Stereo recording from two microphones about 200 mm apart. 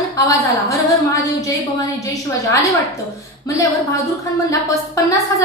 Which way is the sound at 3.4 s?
15° left (ahead or behind).